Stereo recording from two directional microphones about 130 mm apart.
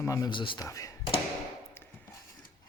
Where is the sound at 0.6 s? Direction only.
25° left (ahead or behind).